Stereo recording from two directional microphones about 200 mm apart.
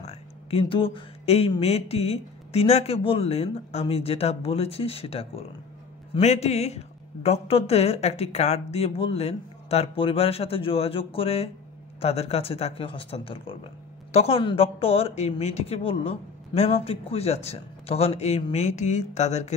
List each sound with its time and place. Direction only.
0.0 s speech: 30° left (ahead or behind)